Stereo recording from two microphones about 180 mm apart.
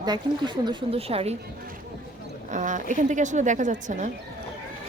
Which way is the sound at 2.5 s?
45° right (ahead or behind).